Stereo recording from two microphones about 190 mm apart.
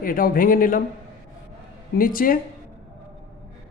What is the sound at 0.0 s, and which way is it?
Speech, 50° left (ahead or behind).